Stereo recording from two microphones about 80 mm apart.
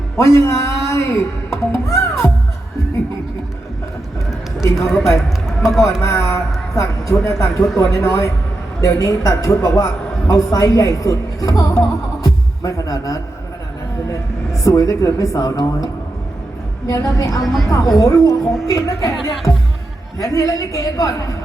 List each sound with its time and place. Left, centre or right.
0.2 s music: left
4.7 s a man's voice: centre
6.0 s a woman's voice: left
7.4 s a man's voice: centre
7.8 s a woman's voice: left
12.2 s music: left
14.6 s a man's voice: left
17.4 s a man's voice: centre
17.9 s a man's voice: left
20.1 s a woman's voice: left